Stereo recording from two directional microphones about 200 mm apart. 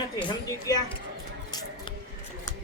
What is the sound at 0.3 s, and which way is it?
Speech, 20° left (ahead or behind).